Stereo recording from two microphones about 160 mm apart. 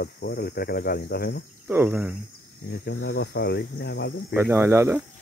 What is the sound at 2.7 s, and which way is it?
Speech, 90° left.